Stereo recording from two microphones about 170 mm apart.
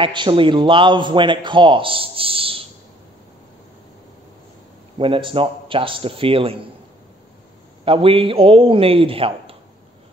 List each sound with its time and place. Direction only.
0.0 s a man's voice: 30° right (ahead or behind)
4.9 s a man's voice: 30° right (ahead or behind)
7.8 s a man's voice: 35° right (ahead or behind)